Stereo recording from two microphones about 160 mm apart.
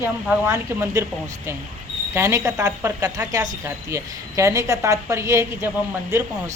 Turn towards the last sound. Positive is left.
turn(degrees=-15)  # may be behind; listen again after turning